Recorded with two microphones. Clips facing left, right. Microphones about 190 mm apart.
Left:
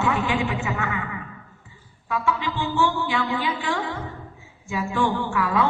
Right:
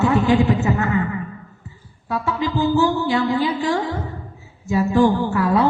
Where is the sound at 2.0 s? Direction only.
40° right (ahead or behind).